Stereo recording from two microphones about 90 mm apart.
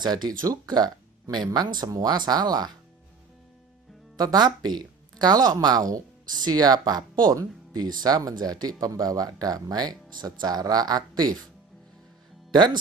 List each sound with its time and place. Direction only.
0.0 s speech: 50° right (ahead or behind)
4.2 s speech: 50° right (ahead or behind)
12.5 s speech: 55° right (ahead or behind)